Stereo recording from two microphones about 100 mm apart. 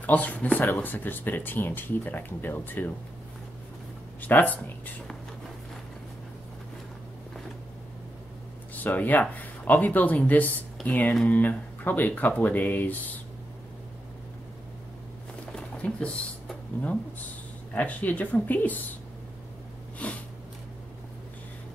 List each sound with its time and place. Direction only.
0.0 s speech: 15° left (ahead or behind)
4.2 s speech: 15° left (ahead or behind)
8.7 s speech: 15° left (ahead or behind)
15.5 s a sound: 10° left (ahead or behind)
17.7 s speech: 15° left (ahead or behind)
20.0 s sniff: 15° left (ahead or behind)